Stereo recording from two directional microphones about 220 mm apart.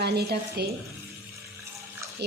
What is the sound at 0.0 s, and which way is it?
Speech, 45° right (ahead or behind).